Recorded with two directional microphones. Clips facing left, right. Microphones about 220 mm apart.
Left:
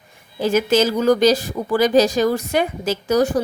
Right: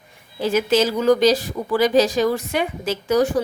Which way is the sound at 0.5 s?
45° left (ahead or behind).